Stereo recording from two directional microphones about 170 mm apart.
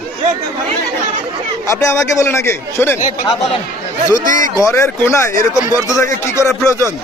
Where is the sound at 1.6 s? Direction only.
15° left (ahead or behind).